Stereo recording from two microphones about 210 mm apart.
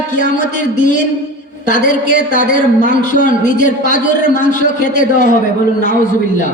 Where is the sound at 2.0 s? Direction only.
40° left (ahead or behind).